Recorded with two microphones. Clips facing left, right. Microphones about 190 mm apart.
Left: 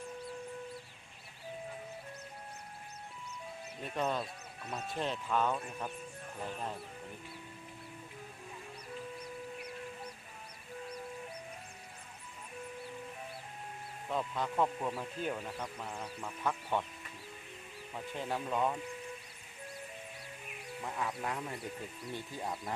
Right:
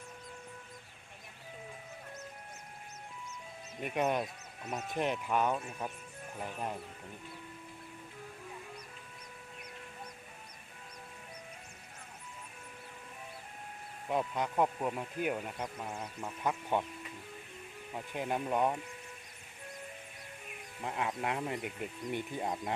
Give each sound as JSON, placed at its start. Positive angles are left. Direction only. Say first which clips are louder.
{"t": 3.8, "sound": "speech", "louder": "right 3 dB", "side_deg": -15}
{"t": 14.0, "sound": "speech", "louder": "right 3 dB", "side_deg": -15}
{"t": 18.1, "sound": "speech", "louder": "right 3 dB", "side_deg": -20}
{"t": 20.8, "sound": "speech", "louder": "right 3 dB", "side_deg": -20}